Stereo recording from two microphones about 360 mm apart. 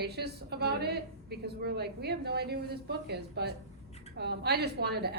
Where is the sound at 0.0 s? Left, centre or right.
Right.